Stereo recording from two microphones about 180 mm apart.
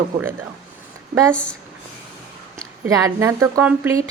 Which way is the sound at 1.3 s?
5° left (ahead or behind).